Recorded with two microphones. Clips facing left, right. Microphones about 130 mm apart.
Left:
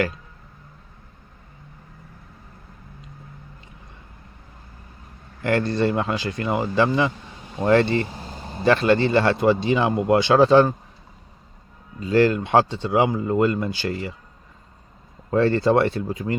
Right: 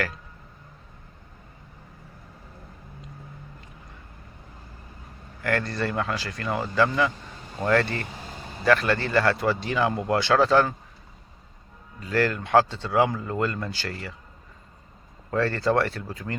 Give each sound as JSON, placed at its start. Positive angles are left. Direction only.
{"t": 5.4, "sound": "speech", "side_deg": 25}
{"t": 11.9, "sound": "speech", "side_deg": 20}
{"t": 15.3, "sound": "speech", "side_deg": 25}